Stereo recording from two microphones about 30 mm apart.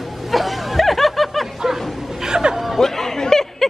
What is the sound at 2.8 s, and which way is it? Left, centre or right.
Chuckle, centre.